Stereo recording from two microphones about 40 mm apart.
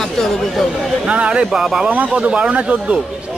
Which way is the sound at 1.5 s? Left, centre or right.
Centre.